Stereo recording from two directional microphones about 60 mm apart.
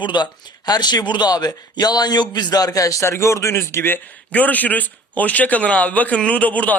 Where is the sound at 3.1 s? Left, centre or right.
Left.